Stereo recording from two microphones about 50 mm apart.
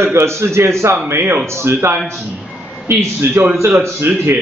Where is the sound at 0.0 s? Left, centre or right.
Right.